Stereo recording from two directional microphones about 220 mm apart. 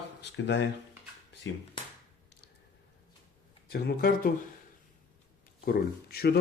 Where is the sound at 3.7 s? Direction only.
45° left (ahead or behind).